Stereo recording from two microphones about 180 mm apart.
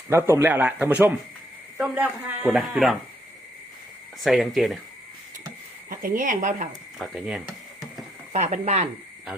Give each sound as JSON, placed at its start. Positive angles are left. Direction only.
{"t": 0.1, "sound": "speech", "side_deg": -15}
{"t": 4.2, "sound": "speech", "side_deg": 0}
{"t": 5.9, "sound": "speech", "side_deg": -50}
{"t": 7.0, "sound": "speech", "side_deg": -5}
{"t": 8.3, "sound": "speech", "side_deg": -40}